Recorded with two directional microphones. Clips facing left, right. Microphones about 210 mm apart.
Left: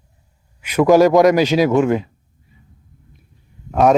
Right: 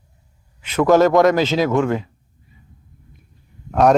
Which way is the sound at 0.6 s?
10° left (ahead or behind).